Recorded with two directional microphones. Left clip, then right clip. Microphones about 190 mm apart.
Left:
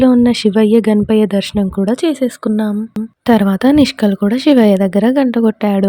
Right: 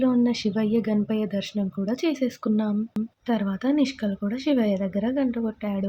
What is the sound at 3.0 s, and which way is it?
Speech, centre (ahead or behind).